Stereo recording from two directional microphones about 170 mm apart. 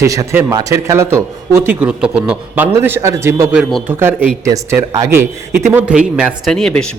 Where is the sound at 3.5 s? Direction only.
5° right (ahead or behind).